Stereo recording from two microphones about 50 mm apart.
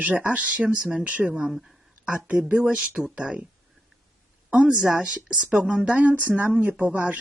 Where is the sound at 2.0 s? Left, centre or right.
Right.